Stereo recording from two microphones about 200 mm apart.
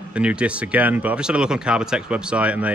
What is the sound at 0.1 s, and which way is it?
Speech, 5° right (ahead or behind).